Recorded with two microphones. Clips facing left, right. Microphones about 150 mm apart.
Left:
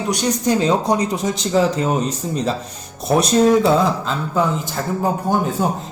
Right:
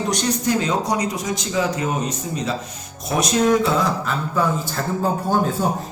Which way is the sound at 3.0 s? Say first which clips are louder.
Left 5 dB; 35° left (ahead or behind).